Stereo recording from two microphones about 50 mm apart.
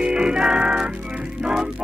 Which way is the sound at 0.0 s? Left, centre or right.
Centre.